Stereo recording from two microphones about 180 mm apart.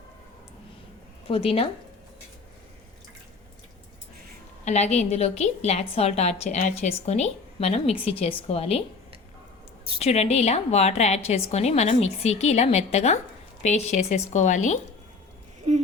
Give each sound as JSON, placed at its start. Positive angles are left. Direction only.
{"t": 1.3, "sound": "a woman's voice", "side_deg": 35}
{"t": 4.6, "sound": "a woman's voice", "side_deg": 40}
{"t": 10.0, "sound": "a woman's voice", "side_deg": 35}